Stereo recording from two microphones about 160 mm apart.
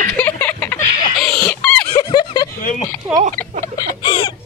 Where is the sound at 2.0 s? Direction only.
25° left (ahead or behind).